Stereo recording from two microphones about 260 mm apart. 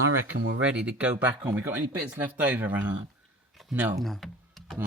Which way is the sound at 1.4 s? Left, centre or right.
Centre.